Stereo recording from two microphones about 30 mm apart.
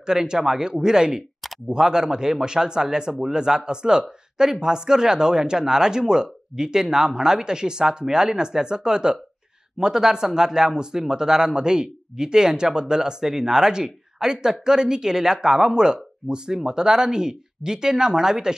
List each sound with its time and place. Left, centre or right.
0.0 s speech: right